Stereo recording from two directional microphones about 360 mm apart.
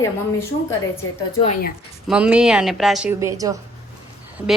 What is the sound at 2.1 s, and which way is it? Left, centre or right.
A woman's voice, centre.